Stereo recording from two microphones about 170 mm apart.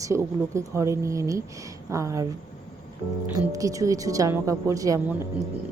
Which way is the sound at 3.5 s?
20° right (ahead or behind).